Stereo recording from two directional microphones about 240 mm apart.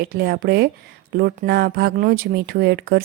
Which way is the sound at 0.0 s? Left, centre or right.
Right.